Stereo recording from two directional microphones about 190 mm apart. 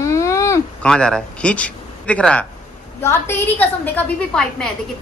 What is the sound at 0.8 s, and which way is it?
A man's voice, 5° left (ahead or behind).